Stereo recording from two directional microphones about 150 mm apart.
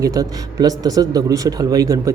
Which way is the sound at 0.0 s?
25° right (ahead or behind).